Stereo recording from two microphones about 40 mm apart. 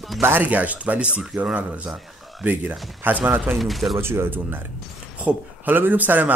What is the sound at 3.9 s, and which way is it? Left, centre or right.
Speech, right.